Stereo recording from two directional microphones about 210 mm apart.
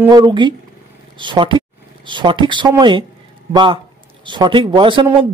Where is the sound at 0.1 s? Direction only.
20° right (ahead or behind).